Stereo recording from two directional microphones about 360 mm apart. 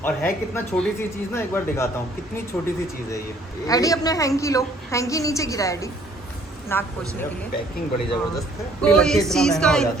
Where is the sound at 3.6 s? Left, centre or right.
Centre.